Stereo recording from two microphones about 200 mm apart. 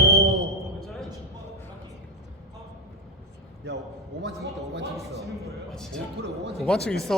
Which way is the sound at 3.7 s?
60° right (ahead or behind).